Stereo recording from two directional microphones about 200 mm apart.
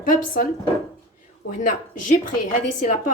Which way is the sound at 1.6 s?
40° left (ahead or behind).